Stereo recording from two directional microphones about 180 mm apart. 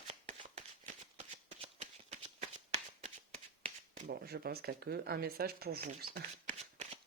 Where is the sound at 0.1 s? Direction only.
35° right (ahead or behind).